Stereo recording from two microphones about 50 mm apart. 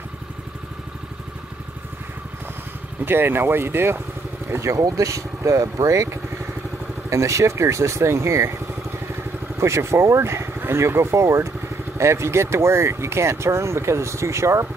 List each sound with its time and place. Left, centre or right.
3.1 s speech: right
4.6 s speech: right
9.6 s speech: right